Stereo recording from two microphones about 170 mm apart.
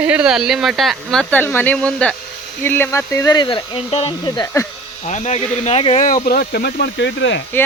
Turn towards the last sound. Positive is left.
turn(degrees=90)